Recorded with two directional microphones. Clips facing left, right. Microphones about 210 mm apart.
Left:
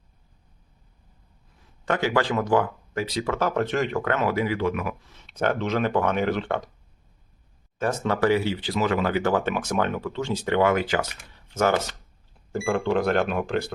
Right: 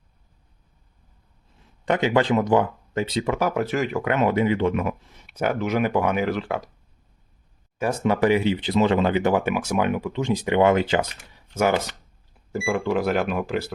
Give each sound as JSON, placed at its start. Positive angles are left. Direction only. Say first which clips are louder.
{"t": 1.8, "sound": "speech", "louder": "right 3 dB", "side_deg": -20}
{"t": 5.2, "sound": "speech", "louder": "right 1 dB", "side_deg": -10}
{"t": 7.8, "sound": "speech", "louder": "right 2 dB", "side_deg": -10}
{"t": 11.3, "sound": "speech", "louder": "right 1 dB", "side_deg": -10}